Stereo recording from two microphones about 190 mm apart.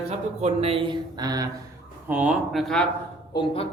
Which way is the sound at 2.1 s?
5° right (ahead or behind).